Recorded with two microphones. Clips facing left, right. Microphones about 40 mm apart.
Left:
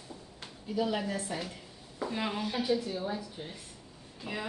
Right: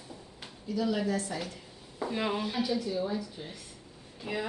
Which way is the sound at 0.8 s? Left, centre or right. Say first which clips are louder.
Right 2 dB; left.